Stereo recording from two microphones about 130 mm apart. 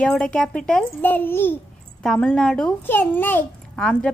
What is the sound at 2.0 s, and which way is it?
A child's voice, 5° left (ahead or behind).